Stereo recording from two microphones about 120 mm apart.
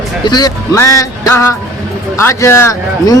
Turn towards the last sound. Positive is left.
turn(degrees=20)  # may be behind; listen again after turning